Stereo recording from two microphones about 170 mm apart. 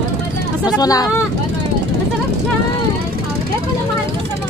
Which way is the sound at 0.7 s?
20° left (ahead or behind).